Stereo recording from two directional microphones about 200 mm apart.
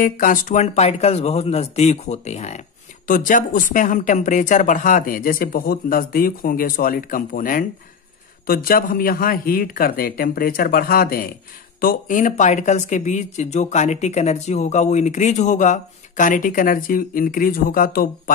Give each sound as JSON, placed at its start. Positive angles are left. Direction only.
{"t": 0.0, "sound": "speech", "side_deg": 40}